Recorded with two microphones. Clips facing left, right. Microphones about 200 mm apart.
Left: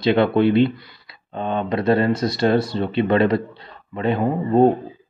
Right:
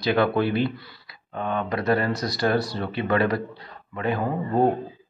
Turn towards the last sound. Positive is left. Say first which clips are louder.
# left 6 dB
turn(degrees=25)  # may be behind; listen again after turning